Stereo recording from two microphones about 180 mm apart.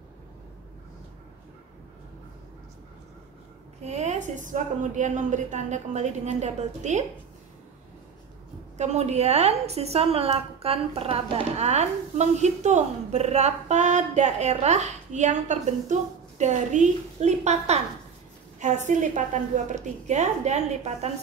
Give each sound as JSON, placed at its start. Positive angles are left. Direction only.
{"t": 3.8, "sound": "a woman's voice", "side_deg": -40}
{"t": 8.7, "sound": "a woman's voice", "side_deg": -40}